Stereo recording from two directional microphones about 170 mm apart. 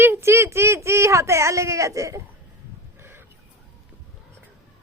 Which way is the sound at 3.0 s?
15° right (ahead or behind).